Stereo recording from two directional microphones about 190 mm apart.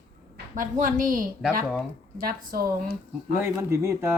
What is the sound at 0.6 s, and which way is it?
A woman's voice, 45° right (ahead or behind).